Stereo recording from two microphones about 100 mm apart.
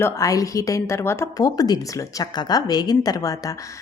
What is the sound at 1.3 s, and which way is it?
A woman's voice, 40° left (ahead or behind).